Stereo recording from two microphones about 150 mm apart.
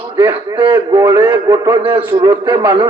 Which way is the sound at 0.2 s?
10° right (ahead or behind).